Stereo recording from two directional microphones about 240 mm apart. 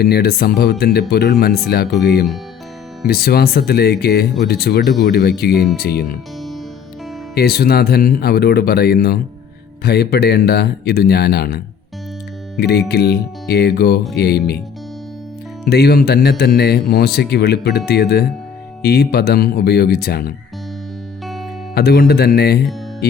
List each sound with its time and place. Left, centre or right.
0.0 s speech: left
7.3 s speech: left
15.6 s speech: left
21.8 s speech: left